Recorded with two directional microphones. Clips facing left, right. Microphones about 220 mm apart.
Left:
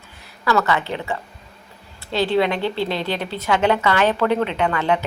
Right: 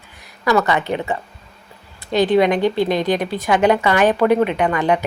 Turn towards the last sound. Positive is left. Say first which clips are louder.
# right 3 dB
turn(degrees=-15)  # may be behind; listen again after turning